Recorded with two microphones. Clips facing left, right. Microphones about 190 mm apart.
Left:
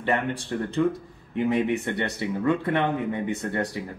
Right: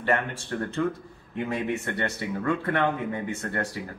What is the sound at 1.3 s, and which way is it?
Speech, 20° left (ahead or behind).